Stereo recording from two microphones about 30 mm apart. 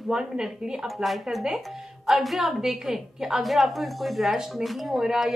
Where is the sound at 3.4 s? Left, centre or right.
Centre.